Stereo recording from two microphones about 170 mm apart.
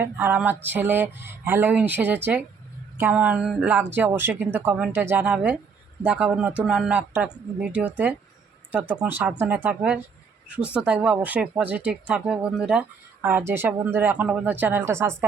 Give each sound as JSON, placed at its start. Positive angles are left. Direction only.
{"t": 0.0, "sound": "speech", "side_deg": -10}